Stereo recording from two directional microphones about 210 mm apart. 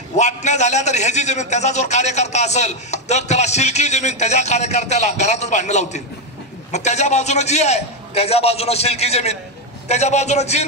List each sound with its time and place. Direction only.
0.2 s a man's voice: 35° left (ahead or behind)